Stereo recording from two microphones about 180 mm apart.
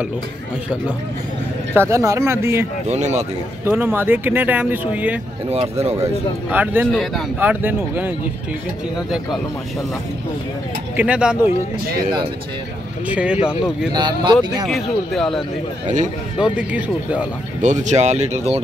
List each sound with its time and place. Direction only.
1.7 s speech: 15° right (ahead or behind)
2.9 s speech: 40° right (ahead or behind)
3.6 s speech: 10° right (ahead or behind)
5.5 s speech: 35° right (ahead or behind)
6.5 s speech: 10° right (ahead or behind)
6.9 s speech: centre (ahead or behind)
7.3 s speech: 10° right (ahead or behind)
11.0 s speech: 5° right (ahead or behind)
13.1 s speech: 5° right (ahead or behind)
13.9 s speech: 25° right (ahead or behind)
14.7 s speech: centre (ahead or behind)
16.5 s speech: 5° right (ahead or behind)
17.6 s speech: 45° right (ahead or behind)